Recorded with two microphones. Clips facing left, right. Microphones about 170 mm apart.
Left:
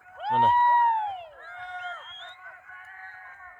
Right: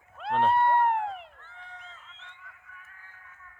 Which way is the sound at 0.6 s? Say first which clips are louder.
Left 1 dB; 15° left (ahead or behind).